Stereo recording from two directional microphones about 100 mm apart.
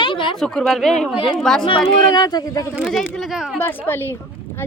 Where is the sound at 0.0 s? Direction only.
55° left (ahead or behind).